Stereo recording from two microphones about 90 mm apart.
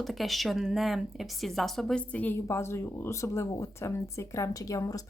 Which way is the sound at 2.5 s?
30° left (ahead or behind).